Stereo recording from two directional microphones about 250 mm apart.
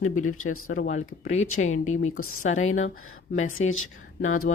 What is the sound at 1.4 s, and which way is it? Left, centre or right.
Speech, left.